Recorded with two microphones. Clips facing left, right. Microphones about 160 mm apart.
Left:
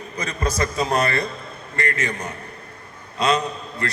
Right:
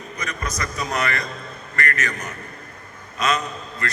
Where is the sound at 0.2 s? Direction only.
30° left (ahead or behind).